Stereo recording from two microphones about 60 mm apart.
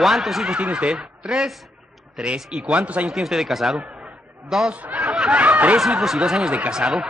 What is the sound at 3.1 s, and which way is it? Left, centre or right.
A man's voice, centre.